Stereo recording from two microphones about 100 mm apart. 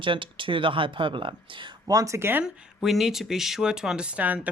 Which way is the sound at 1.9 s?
35° right (ahead or behind).